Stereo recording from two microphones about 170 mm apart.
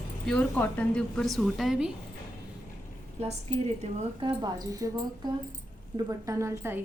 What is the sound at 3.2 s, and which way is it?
Speech, 40° right (ahead or behind).